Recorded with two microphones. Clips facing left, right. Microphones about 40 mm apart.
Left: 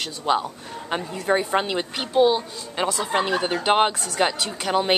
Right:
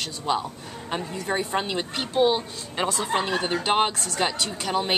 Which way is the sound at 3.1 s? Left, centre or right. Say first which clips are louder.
Left 2 dB; left.